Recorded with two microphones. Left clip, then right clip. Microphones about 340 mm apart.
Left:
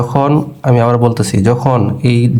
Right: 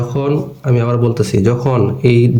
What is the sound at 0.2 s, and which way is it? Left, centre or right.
Speech, centre.